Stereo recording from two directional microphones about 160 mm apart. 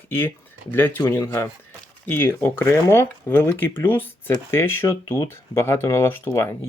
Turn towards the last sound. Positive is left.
turn(degrees=15)  # may be behind; listen again after turning